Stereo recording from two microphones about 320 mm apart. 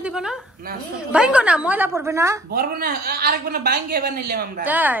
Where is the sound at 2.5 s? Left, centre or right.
Right.